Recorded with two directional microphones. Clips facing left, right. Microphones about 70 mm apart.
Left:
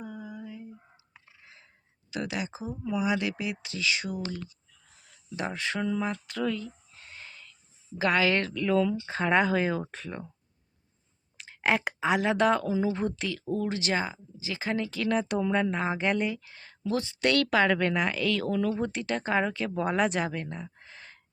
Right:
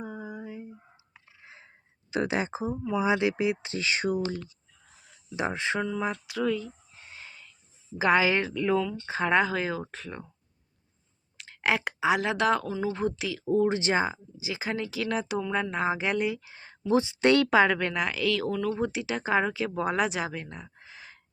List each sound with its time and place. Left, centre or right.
0.0 s a sound: right
2.9 s speech: right
5.4 s speech: right
5.8 s a sound: centre
7.9 s a woman's voice: centre
8.8 s speech: centre
11.3 s speech: centre
13.6 s speech: right
17.7 s speech: centre